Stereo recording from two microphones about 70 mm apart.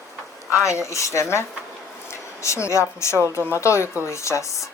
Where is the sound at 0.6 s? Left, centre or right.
Left.